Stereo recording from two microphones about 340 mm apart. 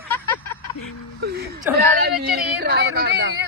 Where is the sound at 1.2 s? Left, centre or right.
Right.